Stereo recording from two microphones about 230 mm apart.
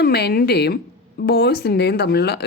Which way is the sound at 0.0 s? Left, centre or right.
Left.